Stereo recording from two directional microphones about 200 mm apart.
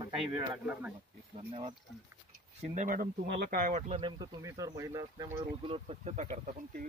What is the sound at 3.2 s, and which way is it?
Speech, 55° right (ahead or behind).